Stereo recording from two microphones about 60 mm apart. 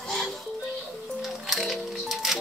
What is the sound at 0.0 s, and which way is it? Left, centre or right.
Music, centre.